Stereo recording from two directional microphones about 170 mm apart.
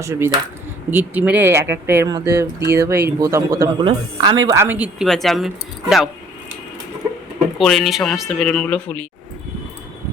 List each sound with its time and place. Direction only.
0.0 s speech: 15° right (ahead or behind)
5.0 s speech: centre (ahead or behind)
7.6 s speech: centre (ahead or behind)